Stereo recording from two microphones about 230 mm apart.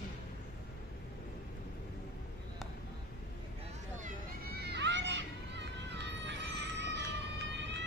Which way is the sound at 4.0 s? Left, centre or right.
Right.